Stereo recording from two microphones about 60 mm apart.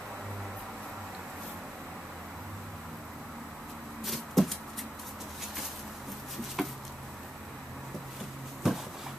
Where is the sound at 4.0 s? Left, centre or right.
Centre.